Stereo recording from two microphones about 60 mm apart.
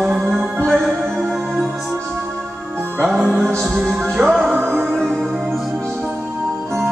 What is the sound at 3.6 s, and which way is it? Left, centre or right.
Music, centre.